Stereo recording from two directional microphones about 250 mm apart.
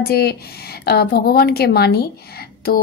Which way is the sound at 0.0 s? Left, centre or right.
Left.